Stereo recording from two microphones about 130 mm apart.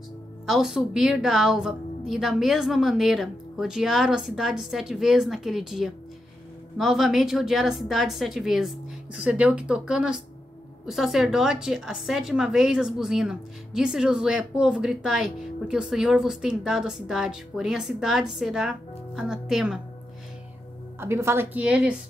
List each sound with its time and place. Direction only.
0.5 s a woman's voice: 5° right (ahead or behind)
21.0 s a woman's voice: 20° right (ahead or behind)